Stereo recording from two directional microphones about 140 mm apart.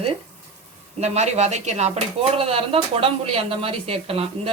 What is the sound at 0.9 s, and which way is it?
Speech, 50° right (ahead or behind).